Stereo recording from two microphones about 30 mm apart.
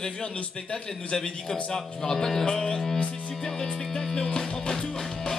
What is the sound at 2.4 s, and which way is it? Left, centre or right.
Speech, left.